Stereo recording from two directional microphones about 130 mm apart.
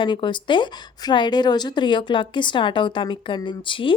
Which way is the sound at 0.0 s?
40° left (ahead or behind).